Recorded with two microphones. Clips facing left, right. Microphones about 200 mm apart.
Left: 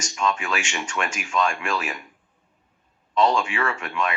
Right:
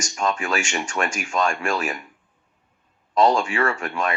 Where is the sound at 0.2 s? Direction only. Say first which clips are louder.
Right 1 dB; 45° right (ahead or behind).